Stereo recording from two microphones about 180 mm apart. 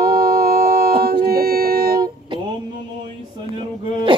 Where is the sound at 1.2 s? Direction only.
55° right (ahead or behind).